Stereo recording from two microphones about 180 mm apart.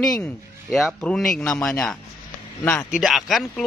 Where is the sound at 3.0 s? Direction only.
Centre (ahead or behind).